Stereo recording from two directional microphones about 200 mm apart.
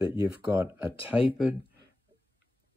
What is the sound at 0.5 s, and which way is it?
Speech, 10° right (ahead or behind).